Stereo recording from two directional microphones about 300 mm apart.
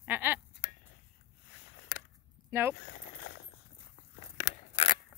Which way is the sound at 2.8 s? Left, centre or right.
Left.